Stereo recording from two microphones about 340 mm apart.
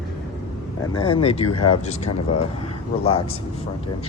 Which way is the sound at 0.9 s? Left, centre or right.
Centre.